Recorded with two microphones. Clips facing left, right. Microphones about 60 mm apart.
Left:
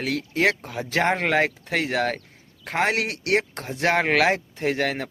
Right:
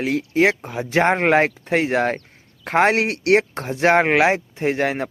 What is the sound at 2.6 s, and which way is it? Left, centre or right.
Speech, right.